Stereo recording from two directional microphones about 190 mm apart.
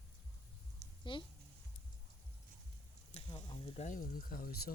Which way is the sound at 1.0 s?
25° left (ahead or behind).